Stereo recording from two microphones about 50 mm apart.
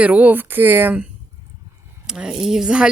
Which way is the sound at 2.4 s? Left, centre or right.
Centre.